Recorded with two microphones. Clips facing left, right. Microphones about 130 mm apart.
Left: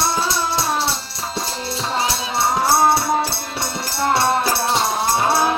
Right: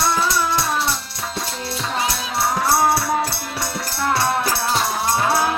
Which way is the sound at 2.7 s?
25° left (ahead or behind).